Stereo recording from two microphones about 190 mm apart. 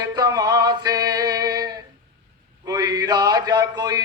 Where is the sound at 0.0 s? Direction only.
20° right (ahead or behind).